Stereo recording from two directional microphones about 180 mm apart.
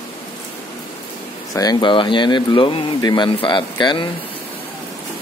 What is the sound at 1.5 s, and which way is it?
Speech, 20° left (ahead or behind).